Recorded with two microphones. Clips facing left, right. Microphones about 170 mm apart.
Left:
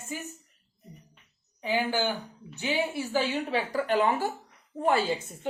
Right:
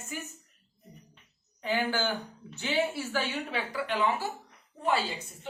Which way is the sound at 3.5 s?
45° left (ahead or behind).